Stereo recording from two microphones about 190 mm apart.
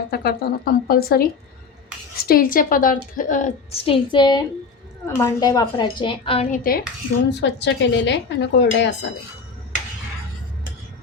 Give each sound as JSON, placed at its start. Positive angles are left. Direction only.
{"t": 0.1, "sound": "a woman's voice", "side_deg": 55}
{"t": 6.5, "sound": "a woman's voice", "side_deg": 50}
{"t": 7.3, "sound": "speech", "side_deg": 65}